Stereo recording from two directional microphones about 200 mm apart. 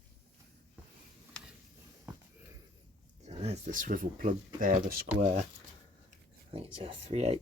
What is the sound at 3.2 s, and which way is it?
Speech, 30° right (ahead or behind).